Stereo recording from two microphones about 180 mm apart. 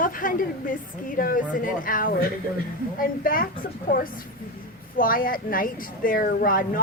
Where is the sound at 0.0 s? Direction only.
50° left (ahead or behind).